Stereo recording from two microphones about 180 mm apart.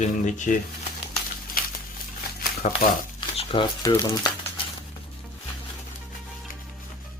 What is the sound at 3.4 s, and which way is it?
Speech, 30° left (ahead or behind).